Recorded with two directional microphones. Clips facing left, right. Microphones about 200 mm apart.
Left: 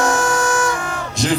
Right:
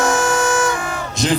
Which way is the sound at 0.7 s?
5° right (ahead or behind).